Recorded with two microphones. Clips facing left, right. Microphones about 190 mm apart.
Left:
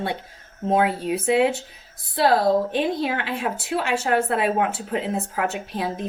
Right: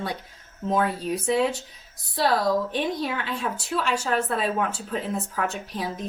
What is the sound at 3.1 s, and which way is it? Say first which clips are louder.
Speech: left 3 dB; 65° left (ahead or behind).